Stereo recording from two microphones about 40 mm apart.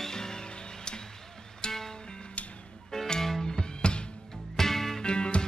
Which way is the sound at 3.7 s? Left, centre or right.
Left.